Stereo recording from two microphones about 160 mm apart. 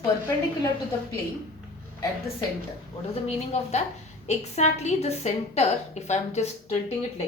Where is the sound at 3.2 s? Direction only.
40° left (ahead or behind).